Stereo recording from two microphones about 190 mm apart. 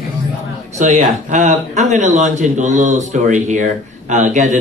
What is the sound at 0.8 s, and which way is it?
Speech, 40° right (ahead or behind).